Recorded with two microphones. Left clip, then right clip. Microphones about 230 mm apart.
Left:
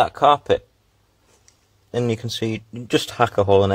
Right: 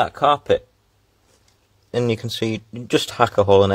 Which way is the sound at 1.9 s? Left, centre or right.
Centre.